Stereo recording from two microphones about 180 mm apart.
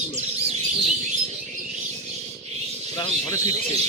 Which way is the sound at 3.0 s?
20° left (ahead or behind).